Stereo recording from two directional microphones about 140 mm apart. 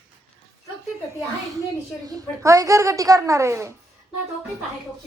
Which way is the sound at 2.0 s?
25° right (ahead or behind).